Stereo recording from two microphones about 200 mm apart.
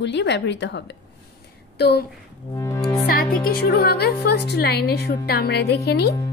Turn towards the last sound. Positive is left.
turn(degrees=55)  # may be behind; listen again after turning